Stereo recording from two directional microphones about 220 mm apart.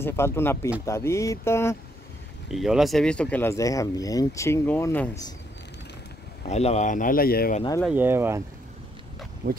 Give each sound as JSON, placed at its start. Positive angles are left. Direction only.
{"t": 0.0, "sound": "speech", "side_deg": 10}
{"t": 2.5, "sound": "speech", "side_deg": 0}
{"t": 6.4, "sound": "speech", "side_deg": 30}
{"t": 7.8, "sound": "speech", "side_deg": -10}
{"t": 9.4, "sound": "speech", "side_deg": -40}